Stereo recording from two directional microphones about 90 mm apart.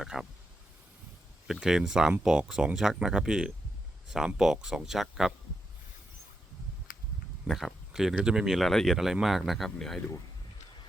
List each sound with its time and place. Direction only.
0.0 s speech: 5° right (ahead or behind)
1.5 s speech: 5° right (ahead or behind)
7.4 s speech: centre (ahead or behind)